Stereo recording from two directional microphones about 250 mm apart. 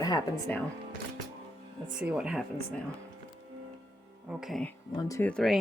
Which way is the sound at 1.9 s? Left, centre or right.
Centre.